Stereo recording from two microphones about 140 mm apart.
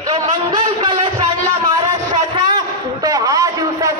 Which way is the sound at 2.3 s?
30° right (ahead or behind).